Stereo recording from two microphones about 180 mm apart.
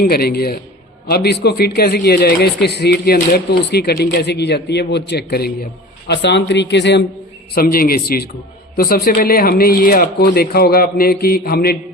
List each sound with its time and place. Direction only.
0.0 s a man's voice: 60° left (ahead or behind)
7.5 s a man's voice: 55° left (ahead or behind)